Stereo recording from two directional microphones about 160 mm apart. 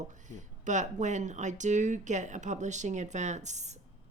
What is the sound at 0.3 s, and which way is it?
Speech, 50° right (ahead or behind).